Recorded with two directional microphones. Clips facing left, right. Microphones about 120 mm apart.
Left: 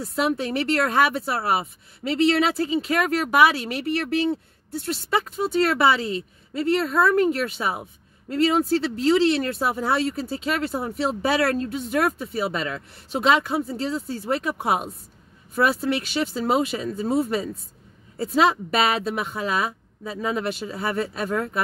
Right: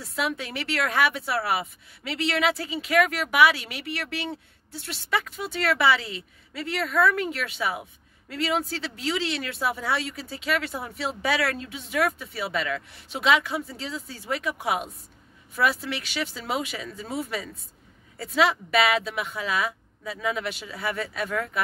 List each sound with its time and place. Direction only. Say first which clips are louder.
0.0 s speech: left 6 dB; 40° left (ahead or behind)
8.9 s speech: left 9 dB; 40° left (ahead or behind)